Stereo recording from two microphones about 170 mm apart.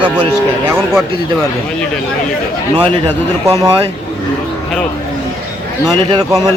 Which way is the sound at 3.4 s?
20° right (ahead or behind).